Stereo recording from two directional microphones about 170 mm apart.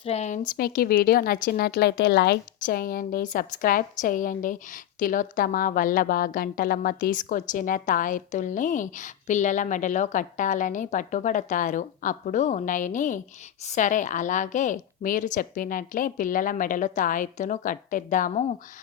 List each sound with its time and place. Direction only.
0.0 s speech: 40° left (ahead or behind)
0.5 s a woman's voice: 65° left (ahead or behind)
2.6 s a woman's voice: 55° left (ahead or behind)